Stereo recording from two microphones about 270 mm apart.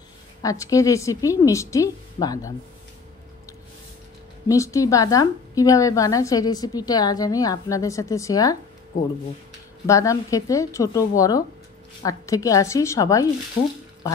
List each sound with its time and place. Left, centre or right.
0.4 s a woman's voice: centre
4.5 s a woman's voice: centre
9.8 s a woman's voice: centre